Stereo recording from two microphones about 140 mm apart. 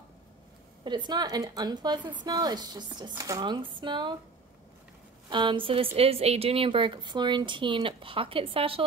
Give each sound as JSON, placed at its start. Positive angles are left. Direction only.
{"t": 0.8, "sound": "speech", "side_deg": -30}
{"t": 5.3, "sound": "speech", "side_deg": -35}